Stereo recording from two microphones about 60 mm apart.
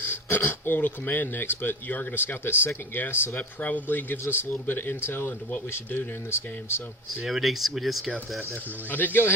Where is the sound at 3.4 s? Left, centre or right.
Left.